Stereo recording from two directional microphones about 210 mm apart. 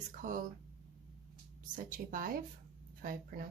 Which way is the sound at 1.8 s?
40° right (ahead or behind).